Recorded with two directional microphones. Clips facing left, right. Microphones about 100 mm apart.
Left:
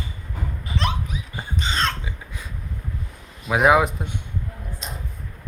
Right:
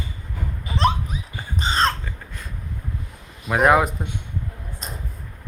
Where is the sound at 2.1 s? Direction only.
5° left (ahead or behind).